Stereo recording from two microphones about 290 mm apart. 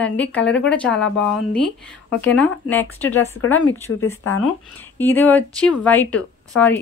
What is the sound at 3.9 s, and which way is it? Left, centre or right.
Speech, left.